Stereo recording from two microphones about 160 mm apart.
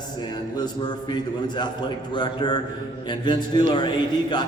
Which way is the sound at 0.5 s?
25° left (ahead or behind).